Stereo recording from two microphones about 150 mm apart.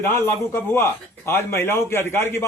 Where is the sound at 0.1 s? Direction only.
15° left (ahead or behind).